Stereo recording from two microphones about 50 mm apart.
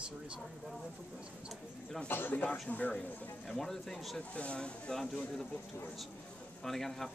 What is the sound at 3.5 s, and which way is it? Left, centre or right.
Speech, centre.